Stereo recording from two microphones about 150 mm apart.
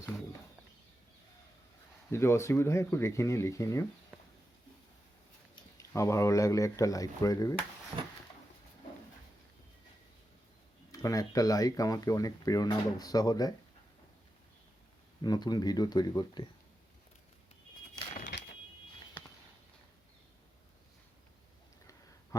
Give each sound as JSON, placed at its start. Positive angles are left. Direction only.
{"t": 2.0, "sound": "speech", "side_deg": 15}
{"t": 5.7, "sound": "speech", "side_deg": 20}
{"t": 10.9, "sound": "speech", "side_deg": 25}
{"t": 15.2, "sound": "speech", "side_deg": 25}